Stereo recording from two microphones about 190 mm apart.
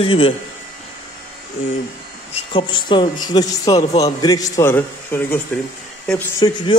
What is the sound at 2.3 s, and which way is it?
A man's voice, 25° left (ahead or behind).